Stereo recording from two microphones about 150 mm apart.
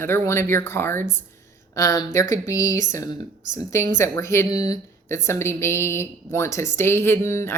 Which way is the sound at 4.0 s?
20° left (ahead or behind).